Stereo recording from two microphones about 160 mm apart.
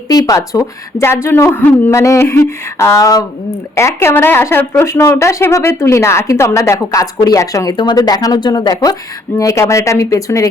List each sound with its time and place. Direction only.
0.1 s a woman's voice: 20° left (ahead or behind)